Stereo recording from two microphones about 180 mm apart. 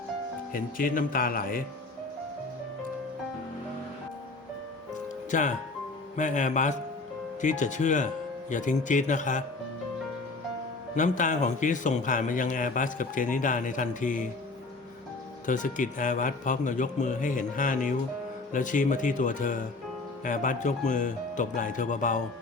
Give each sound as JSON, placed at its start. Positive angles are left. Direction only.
{"t": 0.5, "sound": "a man's voice", "side_deg": 50}
{"t": 5.3, "sound": "a man's voice", "side_deg": 45}
{"t": 10.9, "sound": "a man's voice", "side_deg": 45}
{"t": 15.4, "sound": "a man's voice", "side_deg": 45}